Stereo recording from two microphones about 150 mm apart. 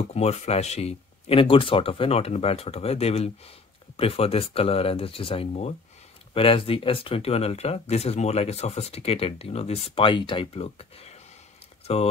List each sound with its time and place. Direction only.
0.0 s speech: 45° left (ahead or behind)